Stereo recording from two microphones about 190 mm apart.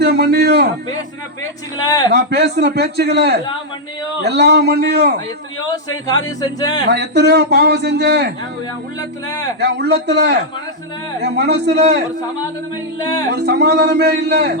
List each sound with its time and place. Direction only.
0.0 s a man's voice: 60° right (ahead or behind)
2.1 s speech: 60° right (ahead or behind)
5.5 s speech: 20° left (ahead or behind)
6.9 s speech: 60° right (ahead or behind)
9.0 s speech: 20° left (ahead or behind)
9.6 s speech: 60° right (ahead or behind)
13.0 s speech: 20° left (ahead or behind)
13.3 s speech: 55° right (ahead or behind)